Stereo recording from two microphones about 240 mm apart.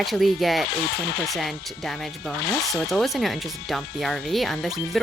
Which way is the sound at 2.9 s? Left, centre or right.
Centre.